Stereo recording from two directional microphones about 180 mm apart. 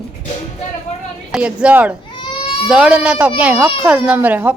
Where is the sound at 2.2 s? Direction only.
30° left (ahead or behind).